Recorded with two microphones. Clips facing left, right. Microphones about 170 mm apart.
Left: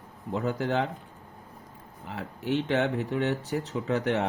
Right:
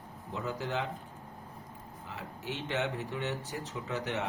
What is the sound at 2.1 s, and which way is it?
Speech, 60° left (ahead or behind).